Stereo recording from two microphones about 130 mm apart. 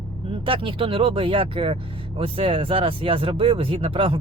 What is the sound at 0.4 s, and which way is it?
Speech, 40° right (ahead or behind).